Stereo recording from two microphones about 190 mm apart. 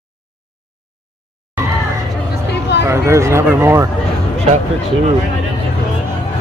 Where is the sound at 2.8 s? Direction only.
15° right (ahead or behind).